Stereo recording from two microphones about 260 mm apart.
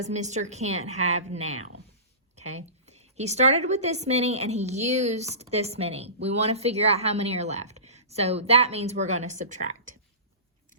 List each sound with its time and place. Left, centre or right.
0.0 s a woman's voice: right